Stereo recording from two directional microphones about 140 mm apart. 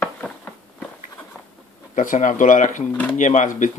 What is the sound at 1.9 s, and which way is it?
Speech, 65° left (ahead or behind).